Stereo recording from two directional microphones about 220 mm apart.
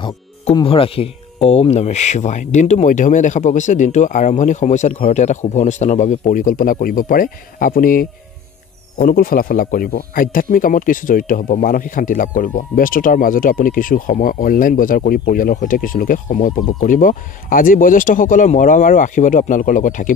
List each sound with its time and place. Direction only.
0.0 s speech: 20° left (ahead or behind)